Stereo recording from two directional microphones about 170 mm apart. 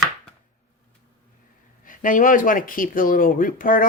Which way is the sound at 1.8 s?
50° left (ahead or behind).